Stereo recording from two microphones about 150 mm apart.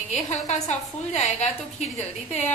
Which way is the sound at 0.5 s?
50° left (ahead or behind).